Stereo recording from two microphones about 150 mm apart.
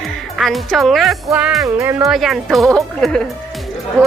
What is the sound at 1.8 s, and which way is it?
Speech, 15° right (ahead or behind).